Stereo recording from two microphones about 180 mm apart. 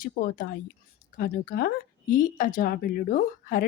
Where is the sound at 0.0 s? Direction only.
50° left (ahead or behind).